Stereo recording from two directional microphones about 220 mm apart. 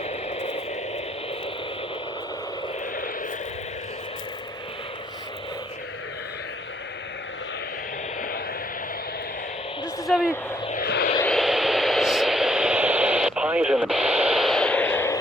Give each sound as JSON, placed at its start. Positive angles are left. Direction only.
{"t": 0.0, "sound": "radio", "side_deg": 30}
{"t": 9.8, "sound": "a sound", "side_deg": -5}
{"t": 10.7, "sound": "vehicle", "side_deg": 45}
{"t": 11.2, "sound": "radio", "side_deg": 0}